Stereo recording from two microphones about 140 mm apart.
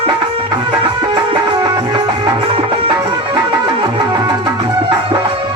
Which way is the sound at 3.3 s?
30° right (ahead or behind).